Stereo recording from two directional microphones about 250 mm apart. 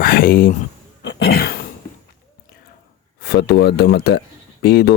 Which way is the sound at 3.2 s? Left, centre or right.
Left.